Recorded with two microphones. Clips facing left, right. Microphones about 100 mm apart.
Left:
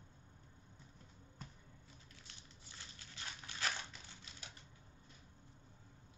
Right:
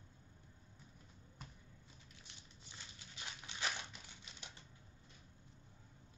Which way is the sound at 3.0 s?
20° right (ahead or behind).